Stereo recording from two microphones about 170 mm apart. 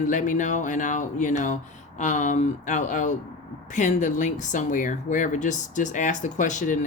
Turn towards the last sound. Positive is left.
turn(degrees=45)  # may be behind; listen again after turning